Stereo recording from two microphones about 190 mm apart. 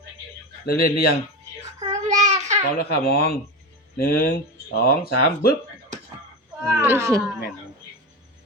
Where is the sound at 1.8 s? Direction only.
35° right (ahead or behind).